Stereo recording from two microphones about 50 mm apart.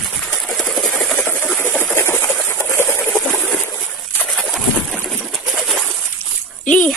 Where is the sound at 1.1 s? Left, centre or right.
Left.